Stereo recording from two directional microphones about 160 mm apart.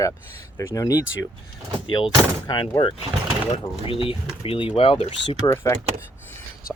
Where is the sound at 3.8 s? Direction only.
35° left (ahead or behind).